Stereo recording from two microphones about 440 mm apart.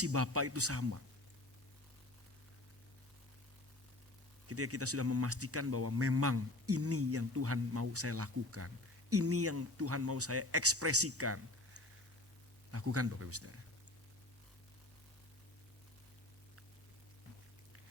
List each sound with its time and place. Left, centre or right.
0.0 s speech: right
4.4 s speech: right